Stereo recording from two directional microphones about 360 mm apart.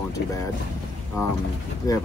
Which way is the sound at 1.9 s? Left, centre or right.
Centre.